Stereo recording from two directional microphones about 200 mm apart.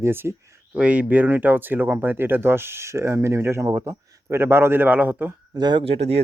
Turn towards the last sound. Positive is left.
turn(degrees=-30)  # may be behind; listen again after turning